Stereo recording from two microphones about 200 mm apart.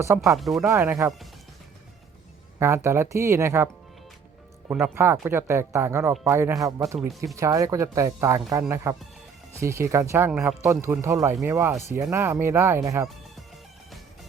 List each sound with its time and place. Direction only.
0.3 s speech: centre (ahead or behind)
0.7 s speech: 15° right (ahead or behind)
2.6 s speech: 15° right (ahead or behind)
4.7 s speech: 10° right (ahead or behind)